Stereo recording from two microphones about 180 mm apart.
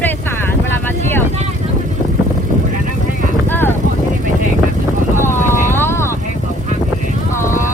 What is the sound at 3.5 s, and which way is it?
Vehicle, 10° left (ahead or behind).